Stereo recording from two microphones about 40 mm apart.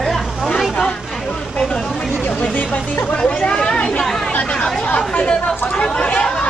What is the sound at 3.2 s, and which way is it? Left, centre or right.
Speech, left.